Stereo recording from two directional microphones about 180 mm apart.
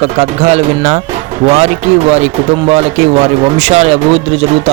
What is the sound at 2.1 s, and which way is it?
Speech, 40° right (ahead or behind).